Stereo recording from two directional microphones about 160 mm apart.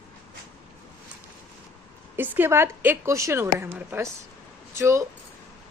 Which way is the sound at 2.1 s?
10° right (ahead or behind).